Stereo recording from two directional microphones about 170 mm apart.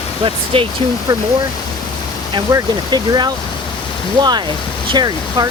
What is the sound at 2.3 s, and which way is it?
Speech, 25° right (ahead or behind).